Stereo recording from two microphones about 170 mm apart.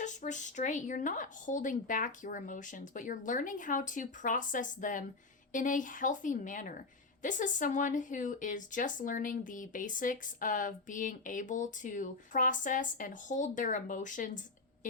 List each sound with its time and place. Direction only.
0.0 s a woman's voice: 45° left (ahead or behind)